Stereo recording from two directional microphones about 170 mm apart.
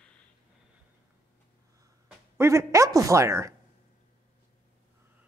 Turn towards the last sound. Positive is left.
turn(degrees=-15)  # may be behind; listen again after turning